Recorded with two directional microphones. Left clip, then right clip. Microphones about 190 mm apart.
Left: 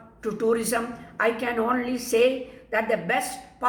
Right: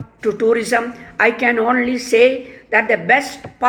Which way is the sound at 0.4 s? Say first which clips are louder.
Right 8 dB; 30° right (ahead or behind).